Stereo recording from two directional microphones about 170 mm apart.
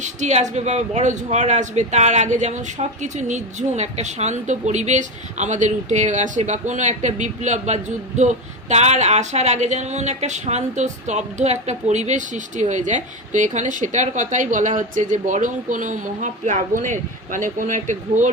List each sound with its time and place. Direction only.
0.0 s speech: 45° right (ahead or behind)